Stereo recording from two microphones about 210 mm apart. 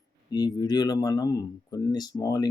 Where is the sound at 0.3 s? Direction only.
20° left (ahead or behind).